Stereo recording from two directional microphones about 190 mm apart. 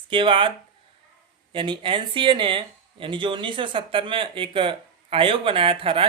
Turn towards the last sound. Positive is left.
turn(degrees=-30)  # may be behind; listen again after turning